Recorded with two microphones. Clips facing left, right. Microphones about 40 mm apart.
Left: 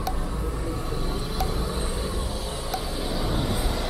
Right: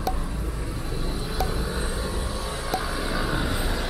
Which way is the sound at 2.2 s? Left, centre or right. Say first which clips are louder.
Right 1 dB; right.